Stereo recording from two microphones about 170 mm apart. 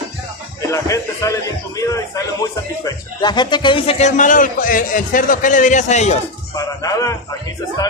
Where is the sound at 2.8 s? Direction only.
25° left (ahead or behind); by 6.1 s 40° left (ahead or behind).